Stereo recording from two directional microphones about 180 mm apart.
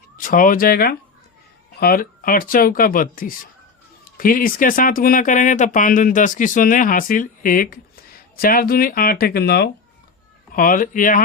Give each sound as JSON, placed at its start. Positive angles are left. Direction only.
{"t": 0.2, "sound": "speech", "side_deg": 50}
{"t": 10.5, "sound": "speech", "side_deg": 50}